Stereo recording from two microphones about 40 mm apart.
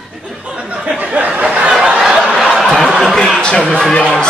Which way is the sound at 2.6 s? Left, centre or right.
Centre.